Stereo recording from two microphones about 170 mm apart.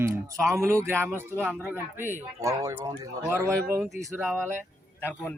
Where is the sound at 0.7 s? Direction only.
15° right (ahead or behind).